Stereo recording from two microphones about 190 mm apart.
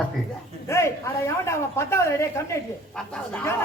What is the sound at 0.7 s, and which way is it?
Speech, 15° left (ahead or behind).